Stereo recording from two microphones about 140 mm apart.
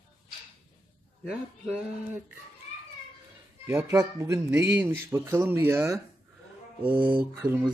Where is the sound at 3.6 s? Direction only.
20° right (ahead or behind).